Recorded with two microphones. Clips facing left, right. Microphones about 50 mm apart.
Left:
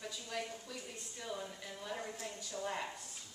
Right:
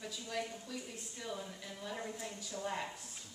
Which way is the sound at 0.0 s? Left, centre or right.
Centre.